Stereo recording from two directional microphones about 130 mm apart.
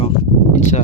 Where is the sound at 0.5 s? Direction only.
65° left (ahead or behind).